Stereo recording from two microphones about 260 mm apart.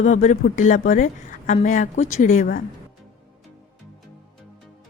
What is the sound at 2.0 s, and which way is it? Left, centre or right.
Speech, left.